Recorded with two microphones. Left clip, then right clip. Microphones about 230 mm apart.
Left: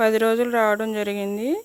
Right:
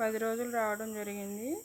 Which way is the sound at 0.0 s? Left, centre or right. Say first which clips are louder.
Left 14 dB; left.